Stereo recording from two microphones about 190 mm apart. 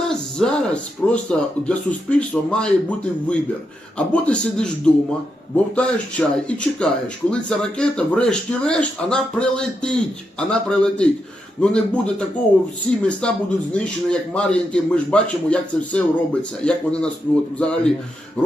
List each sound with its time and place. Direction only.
0.0 s speech: 5° left (ahead or behind)
18.4 s printer: 5° left (ahead or behind)